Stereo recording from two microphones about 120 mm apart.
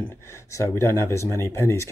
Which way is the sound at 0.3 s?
25° left (ahead or behind).